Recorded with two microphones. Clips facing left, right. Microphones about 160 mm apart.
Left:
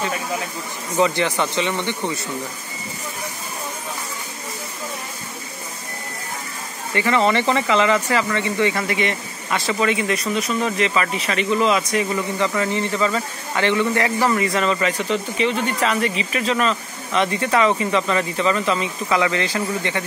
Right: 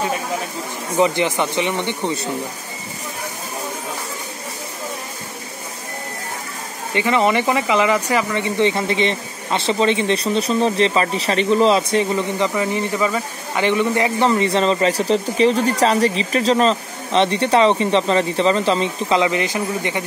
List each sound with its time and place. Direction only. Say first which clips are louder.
0.9 s speech: right 2 dB; 15° right (ahead or behind)
6.9 s speech: right 1 dB; 20° right (ahead or behind)